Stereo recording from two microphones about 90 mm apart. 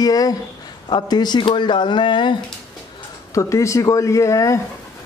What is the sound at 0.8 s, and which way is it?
Speech, 55° left (ahead or behind).